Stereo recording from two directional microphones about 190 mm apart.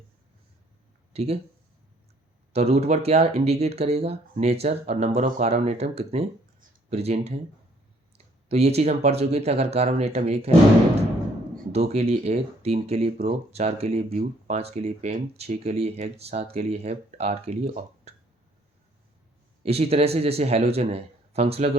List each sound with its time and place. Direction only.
1.1 s speech: 35° right (ahead or behind)
2.5 s speech: 35° right (ahead or behind)
8.4 s speech: 35° right (ahead or behind)
11.7 s speech: 35° right (ahead or behind)
19.6 s speech: 30° right (ahead or behind)